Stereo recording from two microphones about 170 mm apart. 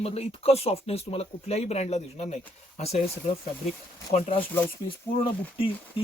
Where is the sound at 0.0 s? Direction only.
35° left (ahead or behind).